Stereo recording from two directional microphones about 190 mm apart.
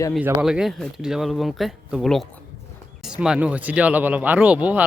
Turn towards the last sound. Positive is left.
turn(degrees=-10)  # may be behind; listen again after turning